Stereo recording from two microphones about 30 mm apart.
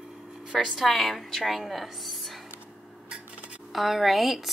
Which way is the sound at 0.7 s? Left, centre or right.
Centre.